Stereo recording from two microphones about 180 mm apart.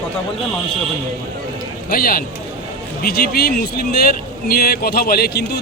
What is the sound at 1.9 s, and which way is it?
A man's voice, 55° left (ahead or behind).